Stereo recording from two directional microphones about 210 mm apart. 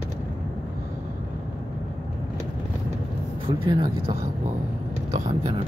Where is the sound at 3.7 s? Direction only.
25° right (ahead or behind).